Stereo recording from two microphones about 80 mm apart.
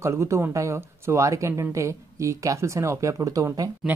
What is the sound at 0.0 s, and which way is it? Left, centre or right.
Speech, right.